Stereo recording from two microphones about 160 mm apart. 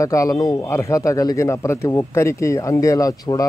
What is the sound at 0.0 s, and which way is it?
A man's voice, 20° left (ahead or behind).